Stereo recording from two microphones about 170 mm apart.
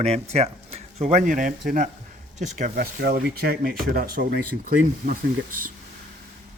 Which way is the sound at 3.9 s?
60° right (ahead or behind).